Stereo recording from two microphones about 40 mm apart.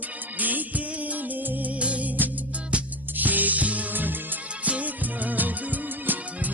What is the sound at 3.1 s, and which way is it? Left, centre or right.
Music, right.